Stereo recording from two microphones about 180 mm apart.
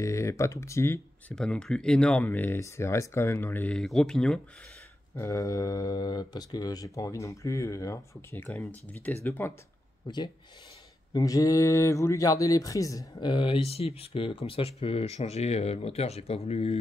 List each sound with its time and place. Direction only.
0.0 s speech: 15° left (ahead or behind)
5.1 s speech: 15° left (ahead or behind)
10.0 s speech: 25° left (ahead or behind)